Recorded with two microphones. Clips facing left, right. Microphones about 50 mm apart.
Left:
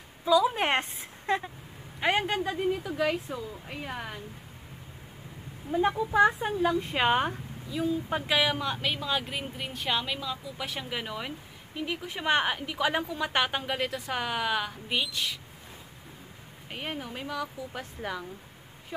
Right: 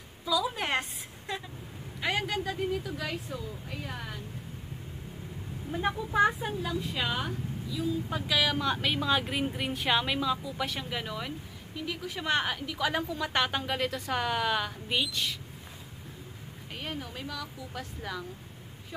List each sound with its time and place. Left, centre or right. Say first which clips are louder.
0.2 s a woman's voice: left 6 dB; left
2.5 s speech: left 3 dB; centre
6.6 s speech: left 9 dB; left
8.5 s speech: right 1 dB; centre
16.7 s speech: left 2 dB; centre